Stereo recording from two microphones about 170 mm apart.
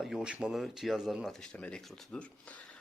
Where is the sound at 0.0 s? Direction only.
5° right (ahead or behind).